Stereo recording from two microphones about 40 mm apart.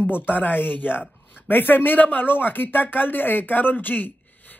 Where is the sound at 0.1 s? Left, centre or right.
Left.